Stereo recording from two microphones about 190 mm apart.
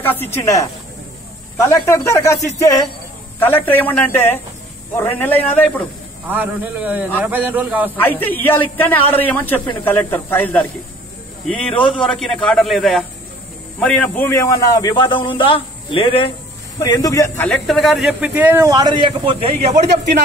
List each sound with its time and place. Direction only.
0.0 s a man's voice: 10° left (ahead or behind)
6.2 s speech: 10° right (ahead or behind)
8.0 s a man's voice: 10° left (ahead or behind); by 20.0 s 35° right (ahead or behind)